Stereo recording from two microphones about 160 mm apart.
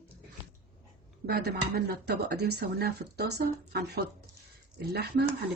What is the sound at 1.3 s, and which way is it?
Speech, 80° right.